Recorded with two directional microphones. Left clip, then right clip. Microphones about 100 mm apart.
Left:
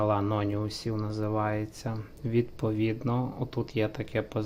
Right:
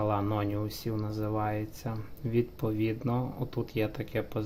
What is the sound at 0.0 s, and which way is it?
Speech, 15° left (ahead or behind).